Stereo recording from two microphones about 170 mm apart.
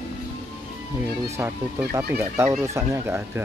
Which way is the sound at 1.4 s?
15° right (ahead or behind).